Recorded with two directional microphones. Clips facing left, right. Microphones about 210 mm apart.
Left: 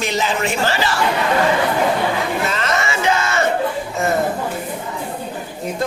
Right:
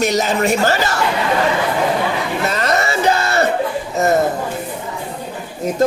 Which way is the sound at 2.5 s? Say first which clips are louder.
Right 3 dB; 40° right (ahead or behind).